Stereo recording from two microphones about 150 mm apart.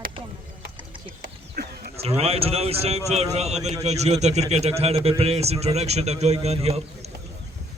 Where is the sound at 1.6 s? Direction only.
90° right.